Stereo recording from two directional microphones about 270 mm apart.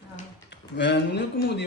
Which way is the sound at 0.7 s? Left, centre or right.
Left.